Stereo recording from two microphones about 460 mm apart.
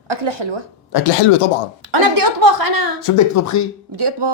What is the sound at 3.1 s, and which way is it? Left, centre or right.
Speech, left.